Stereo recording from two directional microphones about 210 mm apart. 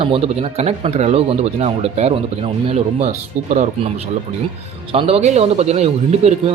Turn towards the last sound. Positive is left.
turn(degrees=-30)  # may be behind; listen again after turning